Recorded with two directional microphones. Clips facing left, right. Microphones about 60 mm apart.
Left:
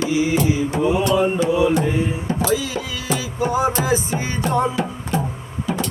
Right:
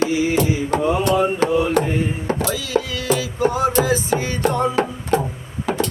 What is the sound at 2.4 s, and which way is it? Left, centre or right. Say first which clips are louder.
Music: left 1 dB; centre.